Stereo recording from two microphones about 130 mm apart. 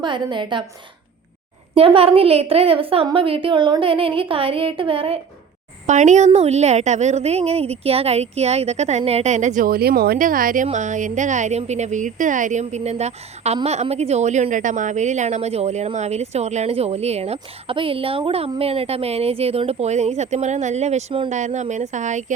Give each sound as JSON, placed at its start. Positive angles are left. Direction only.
{"t": 0.0, "sound": "a woman's voice", "side_deg": -35}
{"t": 1.7, "sound": "a woman's voice", "side_deg": -45}
{"t": 5.8, "sound": "a woman's voice", "side_deg": -65}
{"t": 21.2, "sound": "a woman's voice", "side_deg": -65}